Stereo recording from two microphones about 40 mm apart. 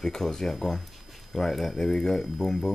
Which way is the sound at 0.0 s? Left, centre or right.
Centre.